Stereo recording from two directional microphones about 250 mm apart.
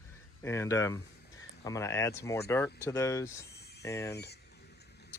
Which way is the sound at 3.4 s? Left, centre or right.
Left.